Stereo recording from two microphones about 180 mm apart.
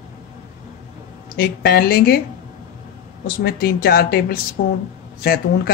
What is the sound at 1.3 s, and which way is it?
Speech, 60° left (ahead or behind).